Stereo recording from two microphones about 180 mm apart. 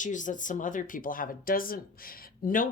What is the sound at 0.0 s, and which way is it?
Speech, 45° left (ahead or behind).